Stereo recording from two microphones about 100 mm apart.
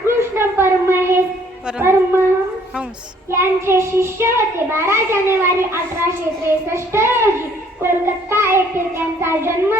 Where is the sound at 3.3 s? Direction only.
25° right (ahead or behind).